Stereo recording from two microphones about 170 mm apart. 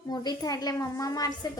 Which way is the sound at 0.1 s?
25° left (ahead or behind).